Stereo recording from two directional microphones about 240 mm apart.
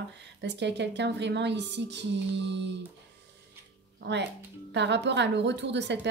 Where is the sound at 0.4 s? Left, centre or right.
Right.